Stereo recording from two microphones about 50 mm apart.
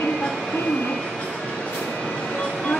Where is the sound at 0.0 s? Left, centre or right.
Centre.